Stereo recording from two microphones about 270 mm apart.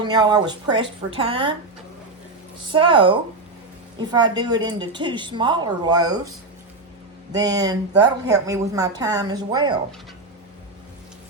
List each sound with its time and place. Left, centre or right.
0.0 s speech: centre
2.7 s speech: centre
7.3 s speech: centre